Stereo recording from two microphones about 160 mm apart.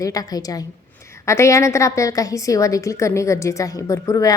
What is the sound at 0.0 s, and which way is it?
A woman's voice, 20° left (ahead or behind).